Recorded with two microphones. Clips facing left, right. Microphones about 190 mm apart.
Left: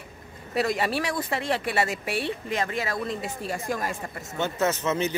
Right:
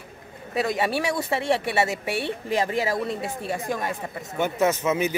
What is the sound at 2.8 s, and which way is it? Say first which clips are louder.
Speech: right 4 dB; 10° right (ahead or behind).